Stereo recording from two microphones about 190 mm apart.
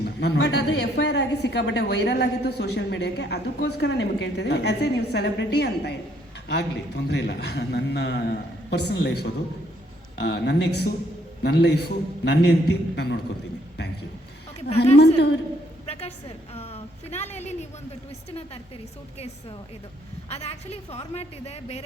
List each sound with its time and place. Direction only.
0.0 s a woman's voice: 65° left (ahead or behind)
14.9 s a woman's voice: 60° left (ahead or behind)
15.9 s a sound: 35° left (ahead or behind)
16.6 s a woman's voice: 35° left (ahead or behind)
20.3 s a woman's voice: 35° left (ahead or behind)